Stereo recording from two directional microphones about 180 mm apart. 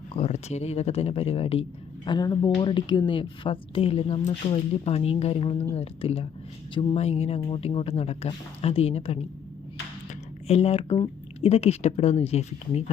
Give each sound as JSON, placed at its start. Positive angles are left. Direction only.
{"t": 0.1, "sound": "a woman's voice", "side_deg": 35}